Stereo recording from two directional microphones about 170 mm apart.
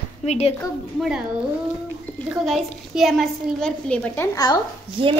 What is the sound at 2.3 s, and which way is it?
A woman's voice, centre (ahead or behind).